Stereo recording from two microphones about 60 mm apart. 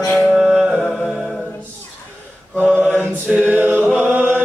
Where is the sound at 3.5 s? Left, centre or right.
Right.